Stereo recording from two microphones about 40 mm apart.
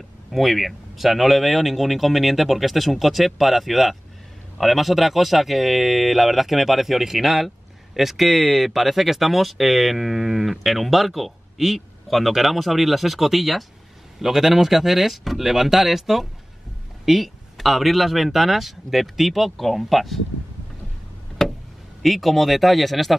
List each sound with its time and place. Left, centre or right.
0.3 s speech: centre
21.4 s vehicle: centre
22.0 s speech: centre